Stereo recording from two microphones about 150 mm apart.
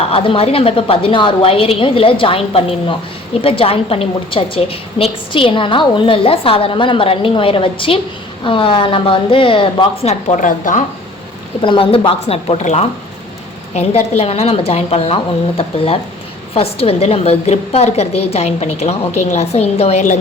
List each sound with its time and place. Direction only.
0.1 s a woman's voice: 35° left (ahead or behind); by 10.8 s 60° left (ahead or behind)
11.6 s a woman's voice: 35° left (ahead or behind); by 20.1 s 50° left (ahead or behind)